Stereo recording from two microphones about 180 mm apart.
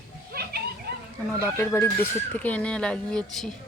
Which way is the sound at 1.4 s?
15° left (ahead or behind).